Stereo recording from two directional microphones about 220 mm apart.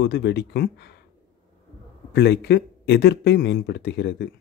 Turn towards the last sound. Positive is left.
turn(degrees=50)  # may be behind; listen again after turning